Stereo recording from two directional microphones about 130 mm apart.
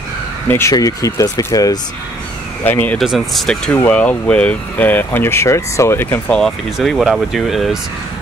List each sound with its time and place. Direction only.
0.5 s speech: 20° left (ahead or behind)
2.6 s speech: 15° left (ahead or behind)
3.0 s speech: centre (ahead or behind); by 6.3 s 20° left (ahead or behind)
6.3 s speech: centre (ahead or behind)